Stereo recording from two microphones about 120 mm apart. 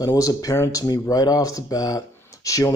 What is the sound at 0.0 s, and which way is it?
Speech, 30° left (ahead or behind).